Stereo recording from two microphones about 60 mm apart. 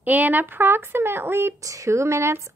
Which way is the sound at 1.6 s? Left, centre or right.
Right.